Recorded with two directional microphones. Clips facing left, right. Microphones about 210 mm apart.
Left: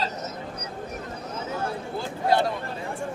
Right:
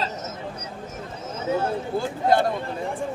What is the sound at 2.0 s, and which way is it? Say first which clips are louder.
Speech: right 2 dB; 50° right (ahead or behind).